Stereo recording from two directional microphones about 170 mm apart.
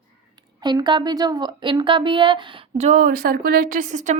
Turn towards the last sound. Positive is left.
turn(degrees=-45)  # may be behind; listen again after turning